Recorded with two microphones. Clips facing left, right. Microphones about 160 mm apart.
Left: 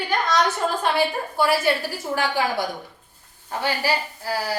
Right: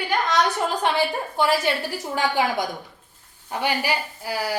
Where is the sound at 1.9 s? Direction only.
20° right (ahead or behind).